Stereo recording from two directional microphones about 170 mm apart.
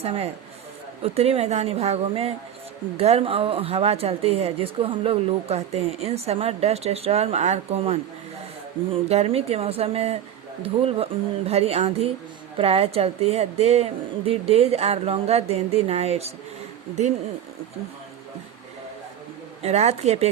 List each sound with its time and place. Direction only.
0.0 s speech: 35° right (ahead or behind)
19.6 s speech: 40° right (ahead or behind)